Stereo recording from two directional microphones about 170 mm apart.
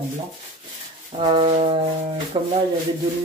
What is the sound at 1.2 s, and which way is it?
Brass instrument, 30° right (ahead or behind).